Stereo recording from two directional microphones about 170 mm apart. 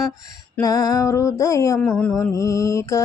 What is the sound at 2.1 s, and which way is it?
Mantra, 20° left (ahead or behind).